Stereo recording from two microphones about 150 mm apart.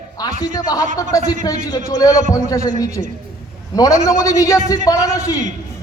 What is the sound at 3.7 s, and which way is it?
A man's voice, 20° left (ahead or behind).